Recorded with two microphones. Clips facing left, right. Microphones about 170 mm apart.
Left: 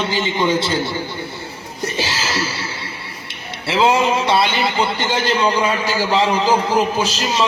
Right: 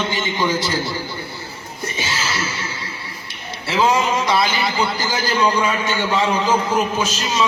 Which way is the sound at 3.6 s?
25° left (ahead or behind).